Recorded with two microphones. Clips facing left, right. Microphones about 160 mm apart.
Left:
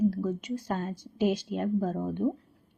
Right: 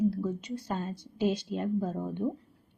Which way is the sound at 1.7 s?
15° right (ahead or behind).